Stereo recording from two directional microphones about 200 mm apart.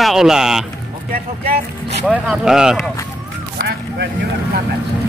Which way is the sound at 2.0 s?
5° right (ahead or behind).